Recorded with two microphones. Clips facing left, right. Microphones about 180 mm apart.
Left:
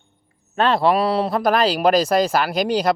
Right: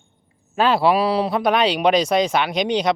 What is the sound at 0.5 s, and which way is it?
Speech, 5° right (ahead or behind).